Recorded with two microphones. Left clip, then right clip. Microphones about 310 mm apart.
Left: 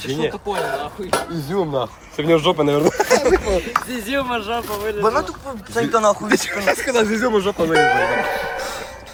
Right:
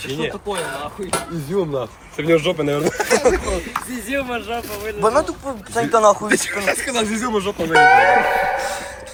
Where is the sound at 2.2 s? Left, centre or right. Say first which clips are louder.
Left 1 dB; left.